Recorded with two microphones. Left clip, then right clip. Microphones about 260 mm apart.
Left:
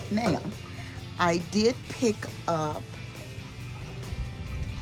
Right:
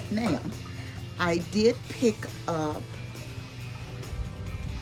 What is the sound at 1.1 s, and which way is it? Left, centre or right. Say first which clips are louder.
Speech: left 2 dB; left.